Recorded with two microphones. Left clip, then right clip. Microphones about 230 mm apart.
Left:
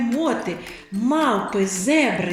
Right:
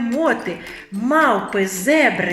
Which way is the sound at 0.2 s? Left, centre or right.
Right.